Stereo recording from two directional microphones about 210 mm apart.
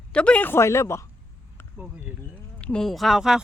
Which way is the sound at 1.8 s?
5° right (ahead or behind).